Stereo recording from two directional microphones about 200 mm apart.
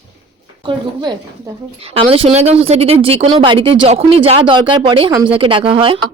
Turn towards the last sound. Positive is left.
turn(degrees=-25)  # may be behind; listen again after turning